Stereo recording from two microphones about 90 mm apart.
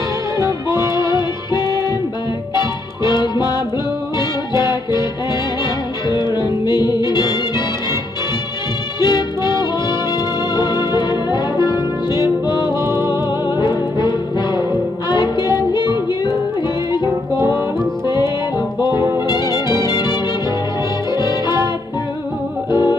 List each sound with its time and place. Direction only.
0.9 s music: 55° left (ahead or behind)
6.0 s music: 55° left (ahead or behind)
9.0 s music: 55° left (ahead or behind)
12.7 s music: 30° right (ahead or behind)
13.1 s music: 55° left (ahead or behind)
18.9 s music: 50° left (ahead or behind)
22.7 s music: 50° left (ahead or behind)